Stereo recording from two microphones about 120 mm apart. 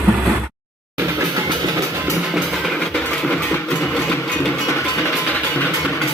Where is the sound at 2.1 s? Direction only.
Centre (ahead or behind); by 5.6 s 15° left (ahead or behind).